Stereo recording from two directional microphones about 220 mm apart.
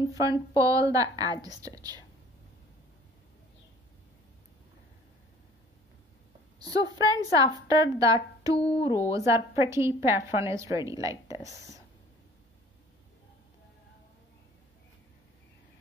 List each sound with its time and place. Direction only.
0.0 s a woman's voice: 15° right (ahead or behind)
6.6 s a woman's voice: 15° right (ahead or behind)